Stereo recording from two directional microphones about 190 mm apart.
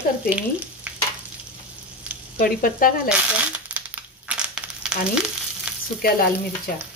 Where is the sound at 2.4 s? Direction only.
45° left (ahead or behind).